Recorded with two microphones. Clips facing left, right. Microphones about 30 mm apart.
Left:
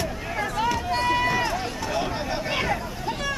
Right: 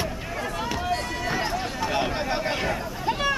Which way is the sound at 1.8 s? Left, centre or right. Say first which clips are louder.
Right 1 dB; centre.